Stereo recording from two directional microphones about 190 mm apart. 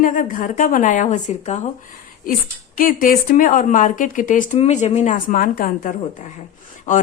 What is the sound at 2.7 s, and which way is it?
A woman's voice, 45° left (ahead or behind).